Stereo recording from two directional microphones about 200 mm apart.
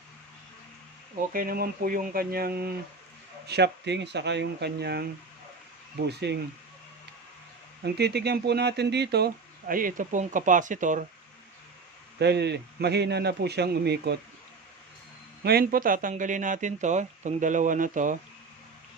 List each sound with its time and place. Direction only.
1.3 s speech: 45° right (ahead or behind)
6.1 s speech: 55° right (ahead or behind)
7.9 s speech: 55° right (ahead or behind); by 11.0 s 40° right (ahead or behind)
12.2 s speech: 55° right (ahead or behind)
15.4 s speech: 50° right (ahead or behind)